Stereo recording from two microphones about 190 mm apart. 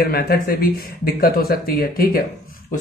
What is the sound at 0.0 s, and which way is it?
Speech, 55° left (ahead or behind).